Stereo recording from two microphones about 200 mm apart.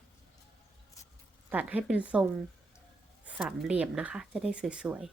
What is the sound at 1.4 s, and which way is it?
Speech, 5° right (ahead or behind).